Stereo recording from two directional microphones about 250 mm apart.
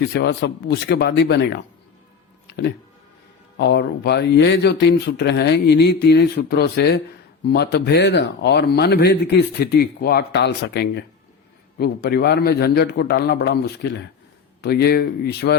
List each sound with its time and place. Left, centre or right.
0.1 s speech: left